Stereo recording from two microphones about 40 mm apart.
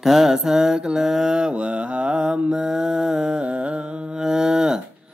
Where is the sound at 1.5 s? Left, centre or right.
Right.